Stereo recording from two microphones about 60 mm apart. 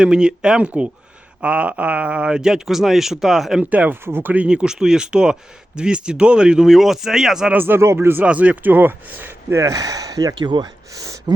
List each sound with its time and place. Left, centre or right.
0.0 s speech: centre
3.6 s speech: right
4.0 s speech: right
4.4 s speech: centre
7.5 s speech: right
8.2 s speech: right
9.6 s speech: right
10.9 s speech: right